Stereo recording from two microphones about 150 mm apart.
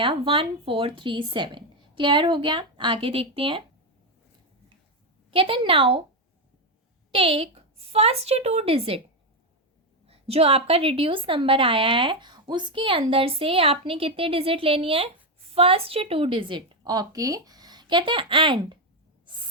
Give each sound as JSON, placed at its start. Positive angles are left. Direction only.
{"t": 0.0, "sound": "a woman's voice", "side_deg": -35}
{"t": 5.3, "sound": "a woman's voice", "side_deg": -35}
{"t": 7.1, "sound": "a woman's voice", "side_deg": -35}
{"t": 10.1, "sound": "a woman's voice", "side_deg": -40}